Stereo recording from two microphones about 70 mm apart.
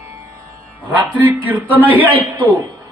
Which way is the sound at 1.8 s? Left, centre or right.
Right.